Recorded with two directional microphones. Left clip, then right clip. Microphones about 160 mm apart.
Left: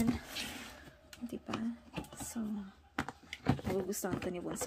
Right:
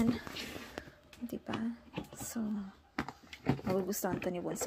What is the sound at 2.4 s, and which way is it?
Speech, 10° right (ahead or behind).